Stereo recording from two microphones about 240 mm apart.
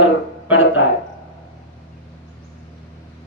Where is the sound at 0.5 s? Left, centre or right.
Left.